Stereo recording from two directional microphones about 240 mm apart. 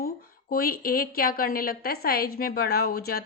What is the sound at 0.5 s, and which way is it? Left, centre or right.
A woman's voice, left.